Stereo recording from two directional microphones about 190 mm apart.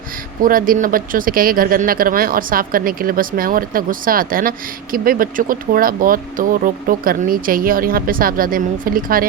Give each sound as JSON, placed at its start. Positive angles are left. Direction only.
{"t": 0.4, "sound": "speech", "side_deg": -45}